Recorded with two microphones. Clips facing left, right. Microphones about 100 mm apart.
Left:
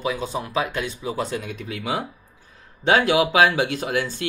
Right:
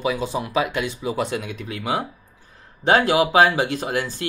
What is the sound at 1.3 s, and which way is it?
Speech, 65° right (ahead or behind).